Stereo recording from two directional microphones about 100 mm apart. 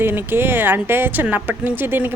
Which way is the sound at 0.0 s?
20° right (ahead or behind).